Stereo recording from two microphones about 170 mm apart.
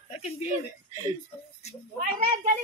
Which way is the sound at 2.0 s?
55° right (ahead or behind).